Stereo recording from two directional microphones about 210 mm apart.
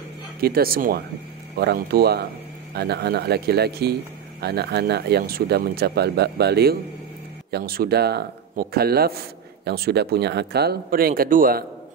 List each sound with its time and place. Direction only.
0.4 s speech: 45° right (ahead or behind)